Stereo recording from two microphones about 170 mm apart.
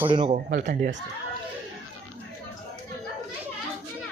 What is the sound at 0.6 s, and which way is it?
Speech, 50° right (ahead or behind).